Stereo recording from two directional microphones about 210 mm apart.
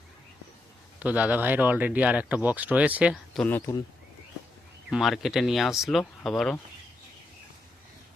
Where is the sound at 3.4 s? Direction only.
10° left (ahead or behind).